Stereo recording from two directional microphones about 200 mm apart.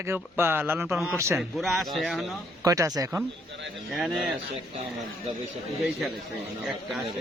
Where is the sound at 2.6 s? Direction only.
15° right (ahead or behind).